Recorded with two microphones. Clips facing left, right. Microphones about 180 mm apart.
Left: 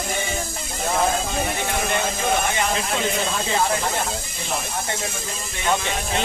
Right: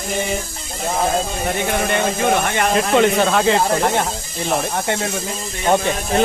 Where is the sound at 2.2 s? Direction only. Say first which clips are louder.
Right 5 dB; 60° right (ahead or behind).